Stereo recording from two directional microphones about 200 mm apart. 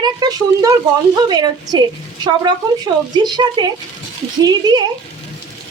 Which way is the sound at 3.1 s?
20° right (ahead or behind).